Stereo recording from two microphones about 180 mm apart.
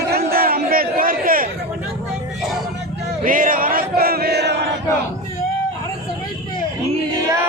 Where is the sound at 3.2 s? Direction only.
50° right (ahead or behind); by 4.5 s 65° right (ahead or behind).